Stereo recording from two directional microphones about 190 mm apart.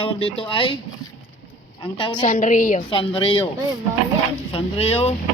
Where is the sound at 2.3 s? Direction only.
45° left (ahead or behind).